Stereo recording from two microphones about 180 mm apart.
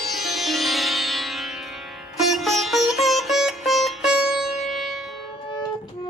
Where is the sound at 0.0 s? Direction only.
Centre (ahead or behind).